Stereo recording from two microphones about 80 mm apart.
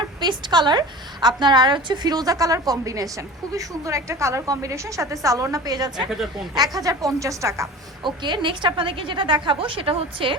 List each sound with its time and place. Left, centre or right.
0.2 s a woman's voice: right
8.0 s a woman's voice: right